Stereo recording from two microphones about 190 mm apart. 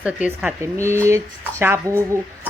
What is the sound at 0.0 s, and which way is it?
Speech, 5° right (ahead or behind).